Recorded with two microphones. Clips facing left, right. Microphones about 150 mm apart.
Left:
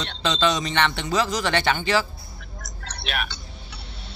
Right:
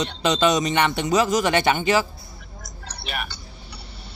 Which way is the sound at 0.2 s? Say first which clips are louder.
Right 3 dB; 20° right (ahead or behind).